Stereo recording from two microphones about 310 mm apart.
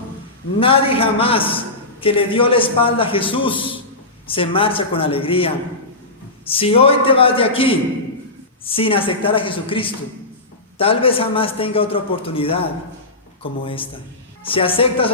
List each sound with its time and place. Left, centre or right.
0.6 s a man's voice: centre